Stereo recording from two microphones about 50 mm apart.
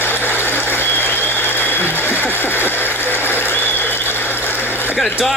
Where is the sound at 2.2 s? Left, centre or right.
Left.